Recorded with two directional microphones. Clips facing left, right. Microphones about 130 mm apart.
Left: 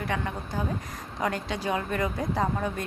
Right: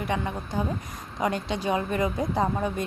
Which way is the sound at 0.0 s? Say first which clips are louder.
Right 2 dB; 20° right (ahead or behind).